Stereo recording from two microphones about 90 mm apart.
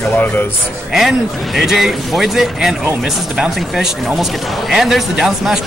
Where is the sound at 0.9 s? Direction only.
5° right (ahead or behind).